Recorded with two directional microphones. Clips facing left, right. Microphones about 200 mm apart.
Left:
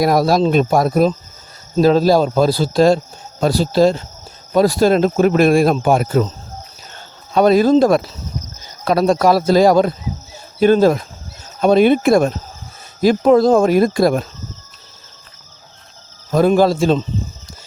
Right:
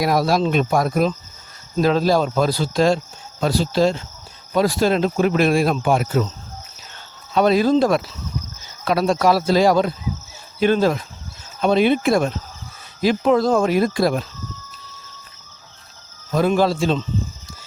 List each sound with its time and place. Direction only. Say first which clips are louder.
0.0 s speech: left 4 dB; 40° left (ahead or behind)
7.3 s speech: left 4 dB; 45° left (ahead or behind)
16.3 s speech: left 5 dB; 45° left (ahead or behind)